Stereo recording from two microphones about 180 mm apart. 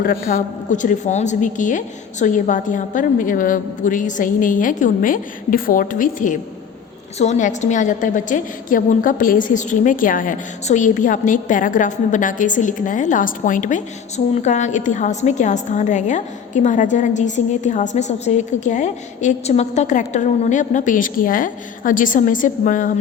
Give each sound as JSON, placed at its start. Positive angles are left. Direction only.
{"t": 0.0, "sound": "a woman's voice", "side_deg": 55}